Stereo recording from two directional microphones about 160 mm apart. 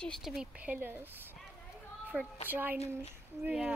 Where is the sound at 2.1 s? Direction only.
5° right (ahead or behind).